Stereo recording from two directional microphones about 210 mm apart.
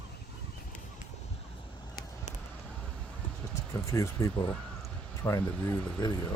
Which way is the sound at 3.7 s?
15° left (ahead or behind).